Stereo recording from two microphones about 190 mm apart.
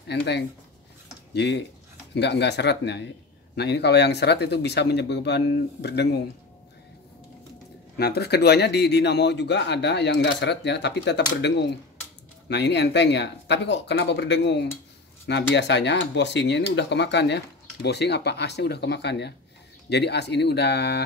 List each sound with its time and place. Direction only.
0.1 s a man's voice: 60° left (ahead or behind)
8.0 s a man's voice: 60° left (ahead or behind)